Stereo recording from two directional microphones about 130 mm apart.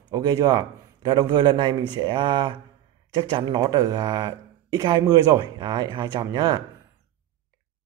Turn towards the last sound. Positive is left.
turn(degrees=-30)  # may be behind; listen again after turning